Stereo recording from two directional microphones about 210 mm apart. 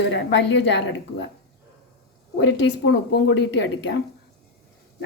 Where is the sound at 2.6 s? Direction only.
55° left (ahead or behind).